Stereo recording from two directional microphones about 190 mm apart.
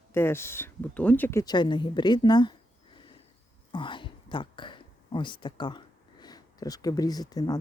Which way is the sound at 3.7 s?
25° left (ahead or behind).